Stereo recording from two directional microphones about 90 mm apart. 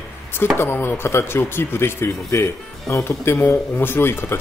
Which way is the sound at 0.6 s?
25° left (ahead or behind).